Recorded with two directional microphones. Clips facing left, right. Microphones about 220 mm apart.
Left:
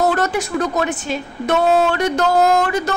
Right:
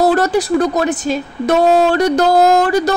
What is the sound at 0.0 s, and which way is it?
A woman's voice, 35° right (ahead or behind).